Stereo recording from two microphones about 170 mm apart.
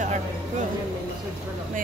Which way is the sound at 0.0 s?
45° right (ahead or behind).